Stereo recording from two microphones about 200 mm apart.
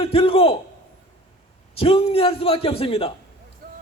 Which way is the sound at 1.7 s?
30° left (ahead or behind).